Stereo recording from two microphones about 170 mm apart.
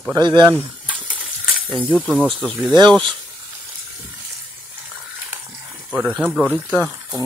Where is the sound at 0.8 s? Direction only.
10° right (ahead or behind).